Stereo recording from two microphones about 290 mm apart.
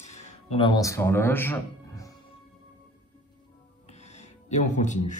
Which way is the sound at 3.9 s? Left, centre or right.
Left.